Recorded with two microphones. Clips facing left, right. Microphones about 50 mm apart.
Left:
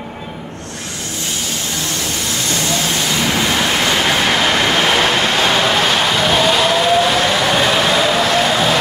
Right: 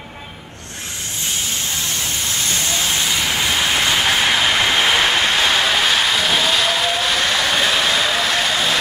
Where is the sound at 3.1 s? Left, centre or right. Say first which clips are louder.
Left 5 dB; centre.